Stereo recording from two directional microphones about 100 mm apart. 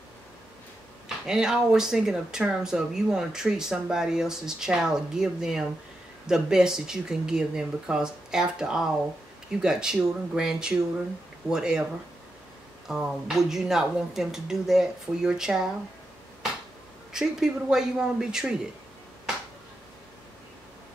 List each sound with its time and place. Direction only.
1.0 s speech: 5° right (ahead or behind)
12.8 s speech: 5° right (ahead or behind)
17.1 s speech: 5° right (ahead or behind)